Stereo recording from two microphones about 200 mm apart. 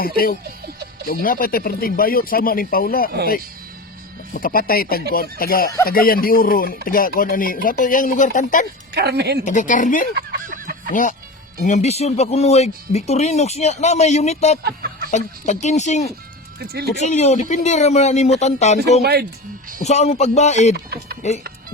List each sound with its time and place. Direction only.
1.0 s speech: 45° left (ahead or behind)
4.4 s speech: 45° left (ahead or behind)
9.0 s a woman's voice: 55° right (ahead or behind)
9.4 s speech: 40° left (ahead or behind)
10.2 s fowl: 45° right (ahead or behind)
11.6 s speech: 35° left (ahead or behind)
14.6 s a sound: 45° right (ahead or behind)
15.1 s speech: 35° left (ahead or behind)
16.6 s speech: 50° right (ahead or behind)
16.9 s speech: 35° left (ahead or behind)
19.8 s speech: 35° left (ahead or behind)
20.7 s speech: 55° right (ahead or behind)